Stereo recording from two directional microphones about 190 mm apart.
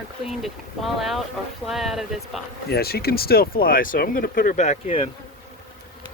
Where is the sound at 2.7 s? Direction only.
55° left (ahead or behind); by 5.0 s 35° left (ahead or behind).